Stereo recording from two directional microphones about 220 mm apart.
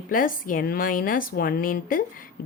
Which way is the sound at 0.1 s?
40° left (ahead or behind).